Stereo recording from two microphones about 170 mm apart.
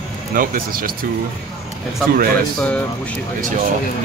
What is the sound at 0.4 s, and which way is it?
Speech, 60° right (ahead or behind).